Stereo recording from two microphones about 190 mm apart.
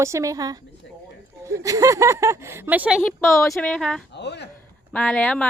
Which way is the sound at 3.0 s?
15° left (ahead or behind).